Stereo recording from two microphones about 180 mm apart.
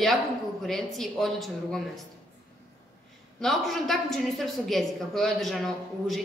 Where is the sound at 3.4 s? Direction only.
Centre (ahead or behind).